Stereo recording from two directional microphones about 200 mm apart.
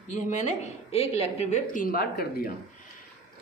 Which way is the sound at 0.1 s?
35° left (ahead or behind).